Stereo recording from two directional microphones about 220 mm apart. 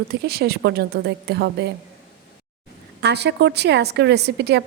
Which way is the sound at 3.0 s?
50° right (ahead or behind).